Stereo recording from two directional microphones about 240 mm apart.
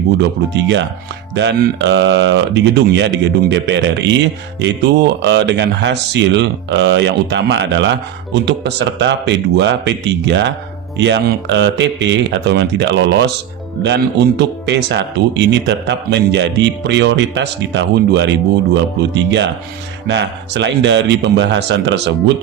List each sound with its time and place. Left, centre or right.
0.2 s speech: right